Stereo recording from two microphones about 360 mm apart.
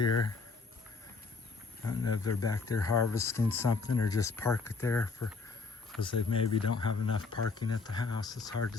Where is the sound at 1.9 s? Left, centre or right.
Left.